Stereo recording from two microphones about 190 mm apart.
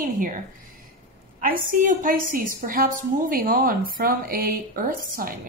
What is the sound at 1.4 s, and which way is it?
A woman's voice, 45° right (ahead or behind).